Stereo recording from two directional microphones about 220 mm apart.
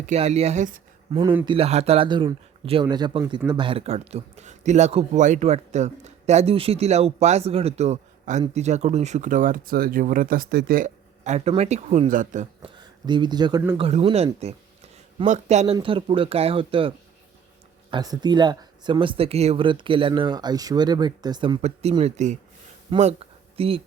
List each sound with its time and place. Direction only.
0.1 s a man's voice: 30° right (ahead or behind)
12.8 s speech: 20° right (ahead or behind)
13.7 s speech: 25° right (ahead or behind)
15.3 s speech: 30° right (ahead or behind)
17.9 s speech: 20° right (ahead or behind)